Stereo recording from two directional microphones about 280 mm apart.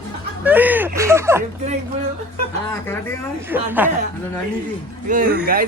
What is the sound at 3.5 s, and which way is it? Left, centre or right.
Speech, centre.